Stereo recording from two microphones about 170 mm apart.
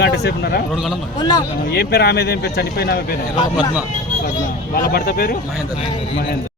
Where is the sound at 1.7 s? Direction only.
70° left (ahead or behind).